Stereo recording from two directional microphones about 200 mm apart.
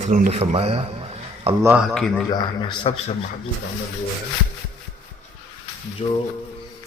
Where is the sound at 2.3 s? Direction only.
25° left (ahead or behind).